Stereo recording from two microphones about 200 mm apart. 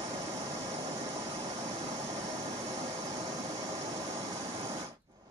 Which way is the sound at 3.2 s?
15° right (ahead or behind).